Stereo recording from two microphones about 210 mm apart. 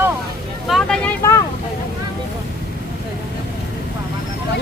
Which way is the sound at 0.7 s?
Centre (ahead or behind).